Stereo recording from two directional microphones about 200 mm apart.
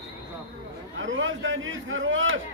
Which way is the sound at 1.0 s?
75° right (ahead or behind).